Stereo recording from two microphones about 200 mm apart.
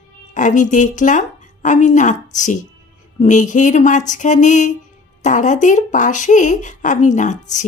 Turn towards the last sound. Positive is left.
turn(degrees=40)  # may be behind; listen again after turning